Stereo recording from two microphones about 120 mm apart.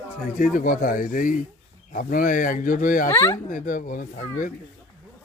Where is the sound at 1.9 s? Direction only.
90° left.